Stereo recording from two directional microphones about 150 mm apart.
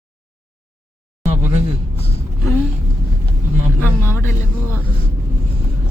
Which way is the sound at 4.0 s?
15° left (ahead or behind).